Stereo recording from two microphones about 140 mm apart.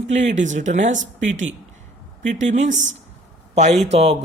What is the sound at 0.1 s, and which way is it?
Speech, 60° right (ahead or behind).